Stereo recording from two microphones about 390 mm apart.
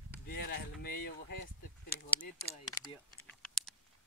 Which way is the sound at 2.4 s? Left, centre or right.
Centre.